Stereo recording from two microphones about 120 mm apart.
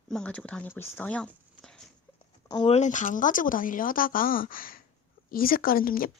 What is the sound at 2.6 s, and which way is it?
Speech, 70° left (ahead or behind).